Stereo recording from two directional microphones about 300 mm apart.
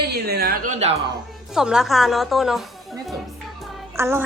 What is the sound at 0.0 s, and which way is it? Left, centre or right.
Speech, right.